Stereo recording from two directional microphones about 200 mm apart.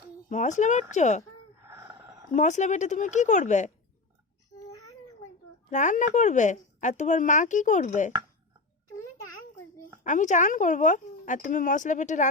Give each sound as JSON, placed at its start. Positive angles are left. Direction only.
{"t": 0.3, "sound": "speech", "side_deg": 35}
{"t": 2.3, "sound": "speech", "side_deg": 35}
{"t": 4.5, "sound": "cat", "side_deg": 20}
{"t": 5.7, "sound": "speech", "side_deg": 40}
{"t": 10.0, "sound": "speech", "side_deg": 40}